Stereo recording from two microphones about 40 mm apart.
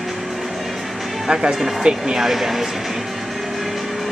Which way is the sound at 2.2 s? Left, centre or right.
Centre.